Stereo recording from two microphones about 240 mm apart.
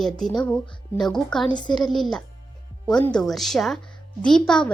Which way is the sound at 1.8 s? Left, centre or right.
Centre.